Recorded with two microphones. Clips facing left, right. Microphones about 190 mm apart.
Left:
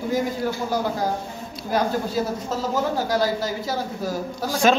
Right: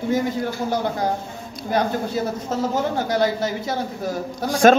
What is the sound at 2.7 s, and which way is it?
A man's voice, 20° right (ahead or behind).